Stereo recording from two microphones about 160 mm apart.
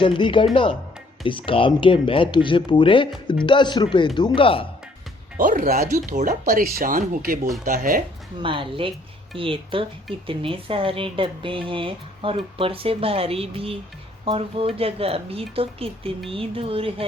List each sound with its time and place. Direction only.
0.0 s speech: 30° left (ahead or behind)
5.4 s speech: 55° right (ahead or behind)
6.1 s speech: 55° right (ahead or behind)
8.4 s speech: 35° right (ahead or behind)